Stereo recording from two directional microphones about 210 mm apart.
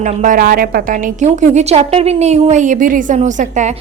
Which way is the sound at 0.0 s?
40° right (ahead or behind).